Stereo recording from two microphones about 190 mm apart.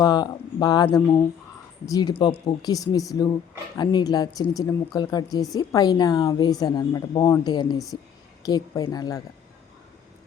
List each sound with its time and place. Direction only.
0.0 s speech: 20° left (ahead or behind)